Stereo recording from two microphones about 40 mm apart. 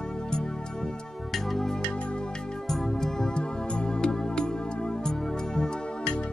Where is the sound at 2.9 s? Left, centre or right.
Centre.